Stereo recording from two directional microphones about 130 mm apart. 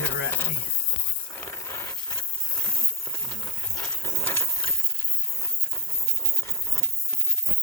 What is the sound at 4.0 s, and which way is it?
Ratchet, 20° left (ahead or behind).